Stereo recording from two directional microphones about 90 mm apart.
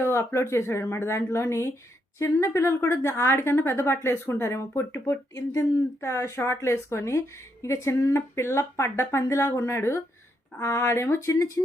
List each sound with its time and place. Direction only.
0.0 s a woman's voice: 30° left (ahead or behind)